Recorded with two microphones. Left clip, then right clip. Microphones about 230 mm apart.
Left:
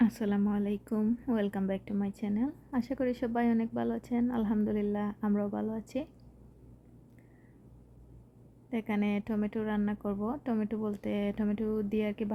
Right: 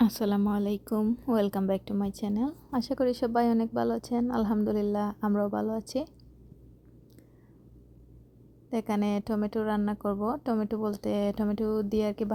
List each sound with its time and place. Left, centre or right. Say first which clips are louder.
0.0 s a woman's voice: right 3 dB; centre
8.7 s a woman's voice: right 4 dB; centre